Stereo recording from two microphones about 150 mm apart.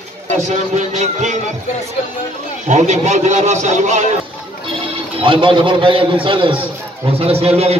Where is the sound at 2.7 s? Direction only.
50° right (ahead or behind).